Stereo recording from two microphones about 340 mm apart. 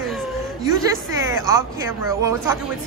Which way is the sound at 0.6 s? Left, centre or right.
Centre.